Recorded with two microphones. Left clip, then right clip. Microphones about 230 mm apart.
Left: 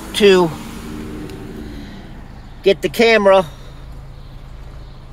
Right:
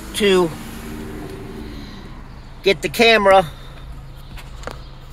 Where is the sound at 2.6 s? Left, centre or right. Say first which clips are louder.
Left 1 dB; centre.